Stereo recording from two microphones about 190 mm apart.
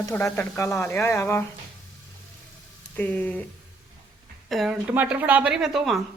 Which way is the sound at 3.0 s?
10° left (ahead or behind).